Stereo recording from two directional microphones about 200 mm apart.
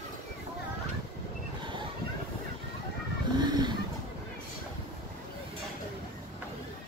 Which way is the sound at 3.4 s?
20° right (ahead or behind).